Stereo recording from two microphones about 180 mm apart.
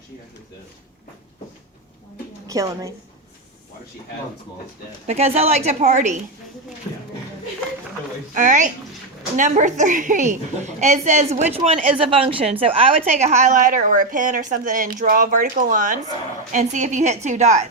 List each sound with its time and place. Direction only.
2.5 s a woman's voice: 20° right (ahead or behind)
5.0 s a woman's voice: 35° right (ahead or behind)
8.4 s a woman's voice: 45° right (ahead or behind)